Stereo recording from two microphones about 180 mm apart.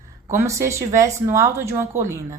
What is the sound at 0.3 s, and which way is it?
A woman's voice, 15° right (ahead or behind).